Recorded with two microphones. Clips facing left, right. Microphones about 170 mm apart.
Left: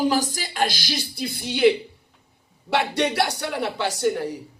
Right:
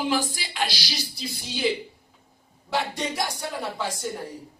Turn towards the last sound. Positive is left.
turn(degrees=75)  # may be behind; listen again after turning